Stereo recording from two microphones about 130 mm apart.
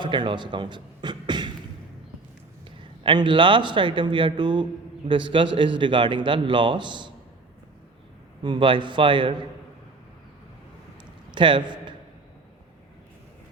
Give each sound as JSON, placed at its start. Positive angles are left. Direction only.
{"t": 0.0, "sound": "beatboxing", "side_deg": -40}
{"t": 3.0, "sound": "speech", "side_deg": -40}
{"t": 8.4, "sound": "speech", "side_deg": -40}
{"t": 11.3, "sound": "a man's voice", "side_deg": -40}